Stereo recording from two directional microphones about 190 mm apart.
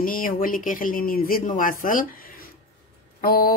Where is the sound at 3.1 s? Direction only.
50° left (ahead or behind).